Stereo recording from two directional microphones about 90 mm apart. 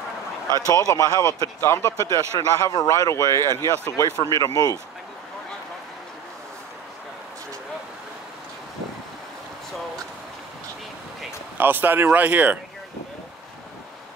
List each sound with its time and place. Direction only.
0.7 s speech: 40° left (ahead or behind)
2.1 s speech: 45° left (ahead or behind)
4.2 s speech: 40° left (ahead or behind)
11.5 s speech: 20° right (ahead or behind)